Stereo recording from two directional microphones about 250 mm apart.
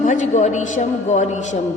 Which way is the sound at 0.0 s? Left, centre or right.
Left.